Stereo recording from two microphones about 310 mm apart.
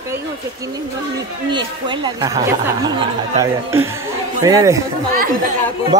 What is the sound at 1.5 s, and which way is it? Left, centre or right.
Speech, centre.